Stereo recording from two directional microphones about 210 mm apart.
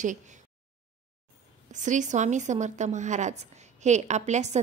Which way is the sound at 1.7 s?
35° right (ahead or behind).